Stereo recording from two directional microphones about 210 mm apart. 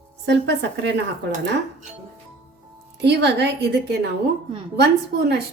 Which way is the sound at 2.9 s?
50° right (ahead or behind).